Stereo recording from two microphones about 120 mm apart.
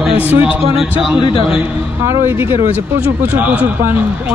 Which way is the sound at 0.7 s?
45° left (ahead or behind).